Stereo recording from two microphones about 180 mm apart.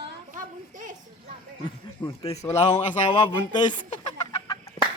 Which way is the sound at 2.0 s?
25° left (ahead or behind).